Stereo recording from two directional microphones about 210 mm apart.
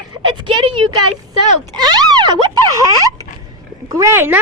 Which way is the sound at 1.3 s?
20° right (ahead or behind).